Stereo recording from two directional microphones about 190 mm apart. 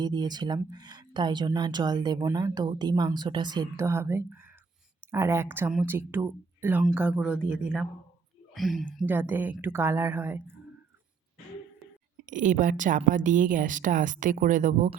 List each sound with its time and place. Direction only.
0.0 s speech: 20° right (ahead or behind); by 8.8 s centre (ahead or behind)
9.0 s speech: 10° right (ahead or behind)
12.2 s a woman's voice: 45° right (ahead or behind)